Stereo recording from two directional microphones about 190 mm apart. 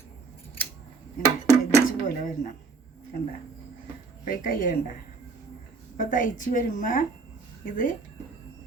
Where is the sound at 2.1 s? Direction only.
45° left (ahead or behind).